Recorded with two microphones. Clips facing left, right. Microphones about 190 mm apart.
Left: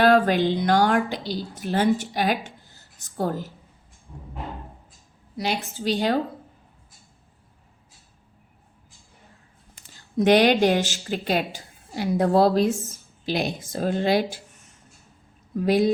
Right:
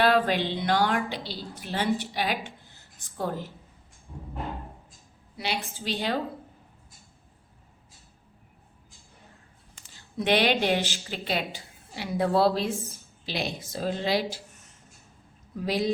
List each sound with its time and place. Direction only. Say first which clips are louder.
0.0 s a woman's voice: left 5 dB; 45° left (ahead or behind)
5.4 s a woman's voice: left 5 dB; 45° left (ahead or behind)
10.2 s a woman's voice: left 7 dB; 45° left (ahead or behind)
15.6 s a woman's voice: left 7 dB; 50° left (ahead or behind)